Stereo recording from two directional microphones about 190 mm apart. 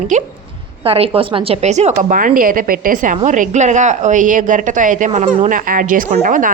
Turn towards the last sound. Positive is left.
turn(degrees=-45)  # may be behind; listen again after turning